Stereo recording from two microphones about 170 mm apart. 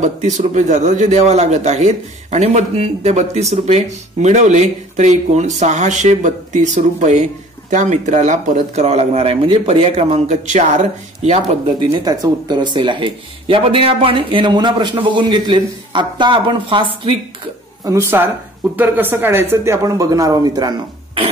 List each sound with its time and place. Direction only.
0.0 s a man's voice: 45° right (ahead or behind)
11.8 s speech: 25° right (ahead or behind)
17.8 s speech: 15° right (ahead or behind)